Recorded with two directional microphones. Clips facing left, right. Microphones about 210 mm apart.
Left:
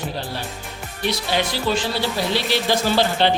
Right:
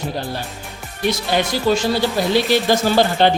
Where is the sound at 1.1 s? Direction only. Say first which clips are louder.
Right 4 dB; 45° right (ahead or behind).